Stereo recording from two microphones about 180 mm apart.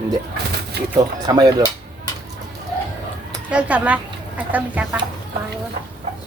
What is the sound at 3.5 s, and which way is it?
Speech, 5° right (ahead or behind).